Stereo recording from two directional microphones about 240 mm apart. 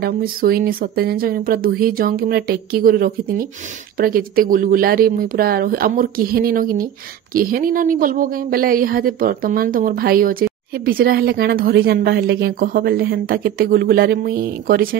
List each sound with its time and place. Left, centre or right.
0.0 s speech: right